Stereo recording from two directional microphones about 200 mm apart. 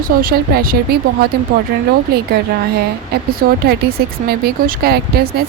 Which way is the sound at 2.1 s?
50° right (ahead or behind).